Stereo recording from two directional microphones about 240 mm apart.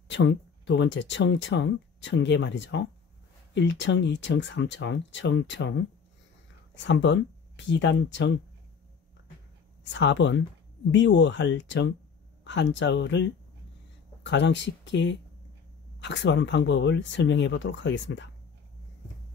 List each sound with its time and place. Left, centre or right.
0.1 s speech: left
9.8 s speech: left